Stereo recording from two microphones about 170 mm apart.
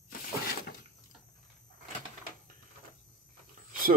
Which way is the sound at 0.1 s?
55° left (ahead or behind).